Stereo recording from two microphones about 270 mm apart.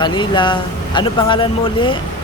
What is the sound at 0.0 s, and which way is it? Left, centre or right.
Speech, centre.